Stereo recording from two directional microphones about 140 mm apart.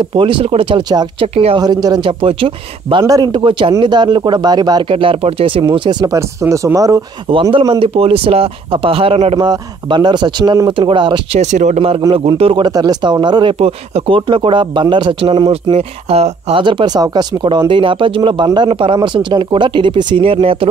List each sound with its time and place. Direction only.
0.1 s speech: 35° right (ahead or behind)
1.2 s speech: 45° right (ahead or behind)
1.6 s speech: 30° right (ahead or behind)
7.5 s speech: 35° right (ahead or behind)
9.4 s speech: 30° right (ahead or behind)
11.3 s speech: 55° right (ahead or behind)
12.1 s speech: 45° right (ahead or behind)